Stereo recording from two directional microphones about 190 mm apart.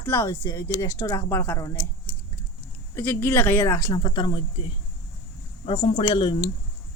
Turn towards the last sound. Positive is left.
turn(degrees=25)  # may be behind; listen again after turning